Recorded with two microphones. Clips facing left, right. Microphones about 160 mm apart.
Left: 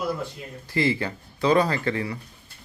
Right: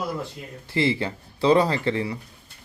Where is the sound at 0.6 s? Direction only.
25° right (ahead or behind).